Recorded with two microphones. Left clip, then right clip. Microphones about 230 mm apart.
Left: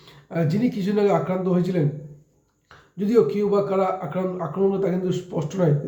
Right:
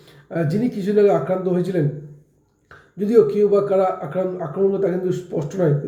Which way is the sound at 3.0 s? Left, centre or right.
Centre.